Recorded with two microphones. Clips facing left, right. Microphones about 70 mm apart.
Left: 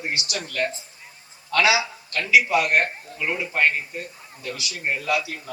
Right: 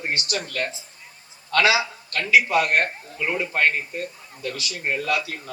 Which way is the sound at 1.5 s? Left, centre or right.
Right.